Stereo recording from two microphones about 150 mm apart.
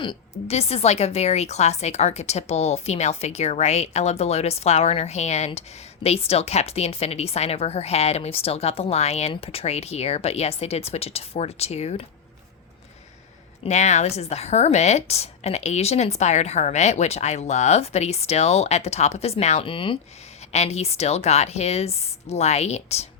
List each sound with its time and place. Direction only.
0.0 s speech: 40° left (ahead or behind)
13.7 s speech: 50° left (ahead or behind)
20.5 s speech: 45° left (ahead or behind)